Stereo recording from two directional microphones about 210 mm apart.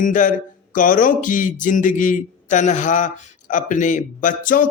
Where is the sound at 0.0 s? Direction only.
40° left (ahead or behind).